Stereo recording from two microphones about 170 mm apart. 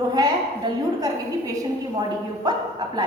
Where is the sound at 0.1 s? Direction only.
25° right (ahead or behind).